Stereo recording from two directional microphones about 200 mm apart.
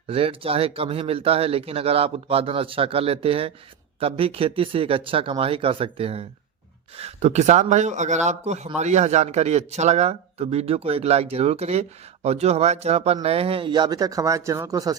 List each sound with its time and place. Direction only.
0.1 s speech: 30° right (ahead or behind)